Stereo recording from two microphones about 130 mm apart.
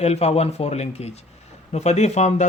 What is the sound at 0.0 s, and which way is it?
Speech, 55° left (ahead or behind).